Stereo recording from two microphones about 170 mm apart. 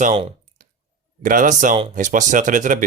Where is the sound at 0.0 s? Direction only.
45° right (ahead or behind).